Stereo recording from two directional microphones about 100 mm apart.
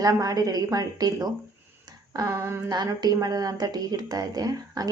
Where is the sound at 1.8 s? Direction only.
35° right (ahead or behind).